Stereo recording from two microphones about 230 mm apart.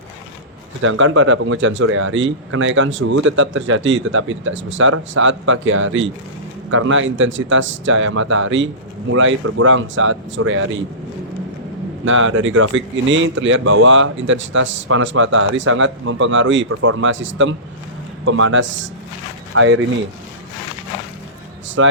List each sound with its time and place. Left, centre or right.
0.8 s speech: right
12.0 s speech: right
21.8 s speech: right